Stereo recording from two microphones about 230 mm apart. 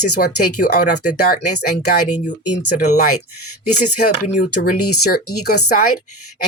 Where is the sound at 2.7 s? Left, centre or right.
Left.